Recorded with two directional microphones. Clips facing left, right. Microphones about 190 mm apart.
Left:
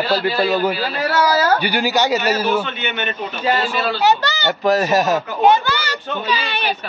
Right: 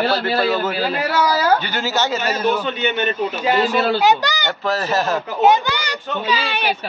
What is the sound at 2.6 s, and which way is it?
Speech, 35° right (ahead or behind).